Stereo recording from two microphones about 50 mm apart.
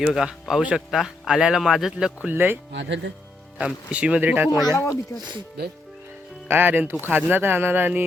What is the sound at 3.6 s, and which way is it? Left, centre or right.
Speech, right.